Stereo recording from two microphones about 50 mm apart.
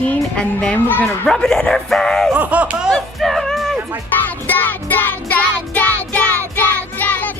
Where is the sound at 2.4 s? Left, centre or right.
Right.